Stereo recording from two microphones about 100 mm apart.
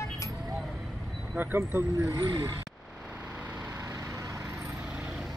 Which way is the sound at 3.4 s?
15° right (ahead or behind).